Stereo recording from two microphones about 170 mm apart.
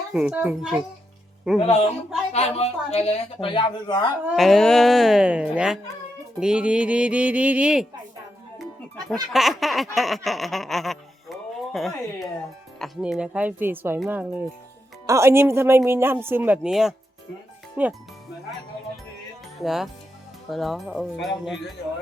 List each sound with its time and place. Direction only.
0.1 s speech: 5° right (ahead or behind)
1.5 s speech: 40° left (ahead or behind)
4.3 s speech: centre (ahead or behind)
8.5 s music: centre (ahead or behind)
9.3 s laughter: centre (ahead or behind)
12.8 s speech: 5° right (ahead or behind)
19.5 s speech: centre (ahead or behind)